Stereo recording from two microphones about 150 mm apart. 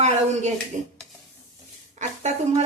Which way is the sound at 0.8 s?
55° right (ahead or behind).